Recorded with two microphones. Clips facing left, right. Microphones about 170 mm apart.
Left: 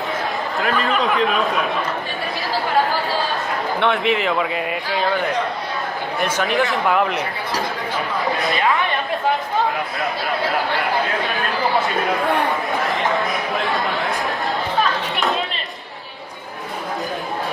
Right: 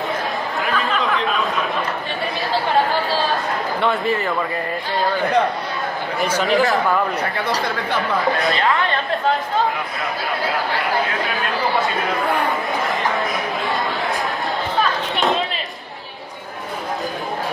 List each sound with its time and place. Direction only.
0.6 s speech: centre (ahead or behind)
4.0 s speech: 75° left (ahead or behind)
6.1 s speech: centre (ahead or behind)
12.9 s a sound: centre (ahead or behind)
14.8 s chatter: centre (ahead or behind)